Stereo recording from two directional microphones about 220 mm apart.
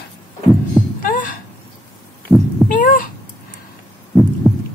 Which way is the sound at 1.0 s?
40° left (ahead or behind).